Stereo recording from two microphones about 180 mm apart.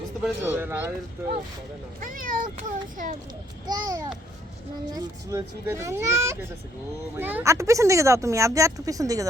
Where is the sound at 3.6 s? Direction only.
25° right (ahead or behind).